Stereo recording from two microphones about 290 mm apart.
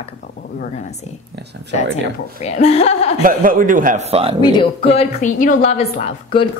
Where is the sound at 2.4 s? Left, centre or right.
Left.